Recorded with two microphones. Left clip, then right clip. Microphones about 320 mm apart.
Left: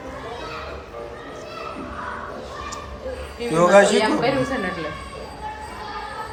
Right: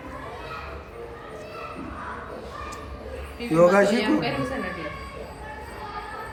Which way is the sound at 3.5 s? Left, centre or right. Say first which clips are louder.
Left 4 dB; centre.